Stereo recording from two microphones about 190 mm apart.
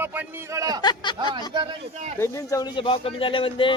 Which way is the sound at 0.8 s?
25° left (ahead or behind).